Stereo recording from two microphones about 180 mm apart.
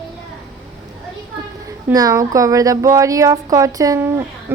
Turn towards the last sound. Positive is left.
turn(degrees=-15)  # may be behind; listen again after turning